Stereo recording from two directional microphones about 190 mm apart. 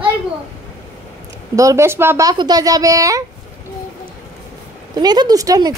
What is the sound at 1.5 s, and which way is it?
Speech, 15° right (ahead or behind).